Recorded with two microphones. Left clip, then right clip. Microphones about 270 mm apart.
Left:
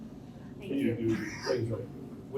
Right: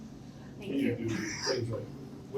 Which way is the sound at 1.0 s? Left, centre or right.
Right.